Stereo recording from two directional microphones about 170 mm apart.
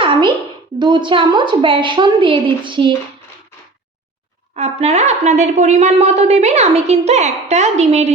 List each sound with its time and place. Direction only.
0.8 s a woman's voice: 25° right (ahead or behind)
4.5 s a woman's voice: 40° right (ahead or behind)